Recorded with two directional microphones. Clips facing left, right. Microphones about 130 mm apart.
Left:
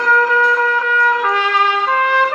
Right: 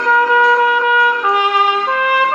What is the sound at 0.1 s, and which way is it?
Music, 25° right (ahead or behind).